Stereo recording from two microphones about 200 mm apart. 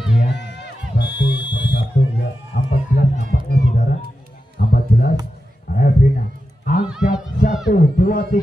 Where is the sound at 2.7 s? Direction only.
45° left (ahead or behind).